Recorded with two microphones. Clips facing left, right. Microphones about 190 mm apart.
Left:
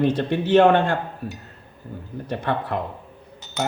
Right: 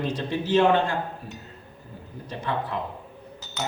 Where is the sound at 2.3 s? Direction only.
60° left (ahead or behind).